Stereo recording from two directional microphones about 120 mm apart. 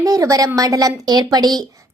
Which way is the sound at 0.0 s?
30° right (ahead or behind).